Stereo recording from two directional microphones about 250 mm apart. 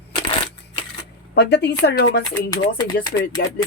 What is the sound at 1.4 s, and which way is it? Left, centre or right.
Speech, left.